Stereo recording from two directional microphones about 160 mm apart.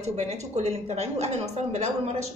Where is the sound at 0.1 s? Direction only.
45° right (ahead or behind).